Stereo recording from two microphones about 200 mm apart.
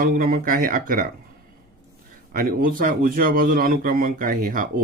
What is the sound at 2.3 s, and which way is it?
A man's voice, 45° right (ahead or behind).